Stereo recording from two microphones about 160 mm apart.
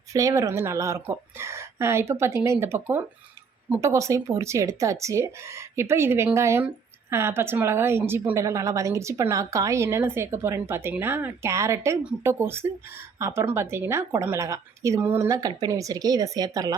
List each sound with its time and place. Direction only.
0.1 s a woman's voice: 20° right (ahead or behind)